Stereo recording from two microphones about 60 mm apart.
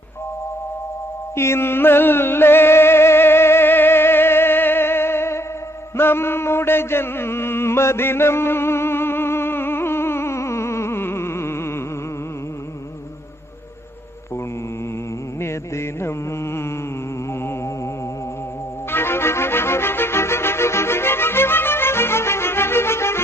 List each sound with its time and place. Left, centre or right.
1.4 s music: left
15.4 s music: left
18.9 s music: left